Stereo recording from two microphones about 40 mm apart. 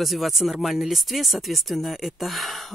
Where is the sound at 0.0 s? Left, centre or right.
Centre.